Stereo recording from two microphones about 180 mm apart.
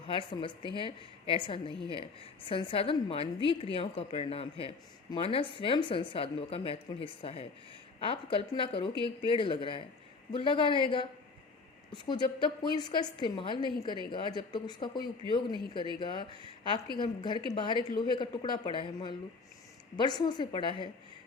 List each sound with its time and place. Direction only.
0.1 s a woman's voice: 30° left (ahead or behind)